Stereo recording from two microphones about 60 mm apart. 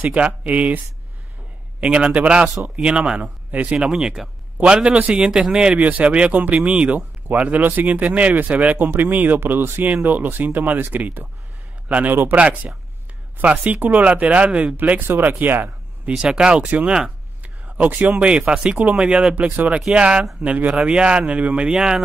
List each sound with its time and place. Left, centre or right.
0.0 s speech: right
1.8 s speech: centre
12.4 s speech: right
13.8 s speech: right
15.0 s speech: right
16.1 s speech: centre
19.5 s speech: right